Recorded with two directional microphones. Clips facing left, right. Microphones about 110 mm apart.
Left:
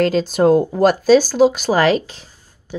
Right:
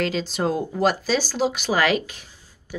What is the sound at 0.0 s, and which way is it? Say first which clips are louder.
Speech: left 9 dB; 45° left (ahead or behind).